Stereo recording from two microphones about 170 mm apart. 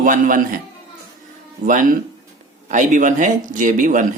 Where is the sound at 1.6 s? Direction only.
50° right (ahead or behind).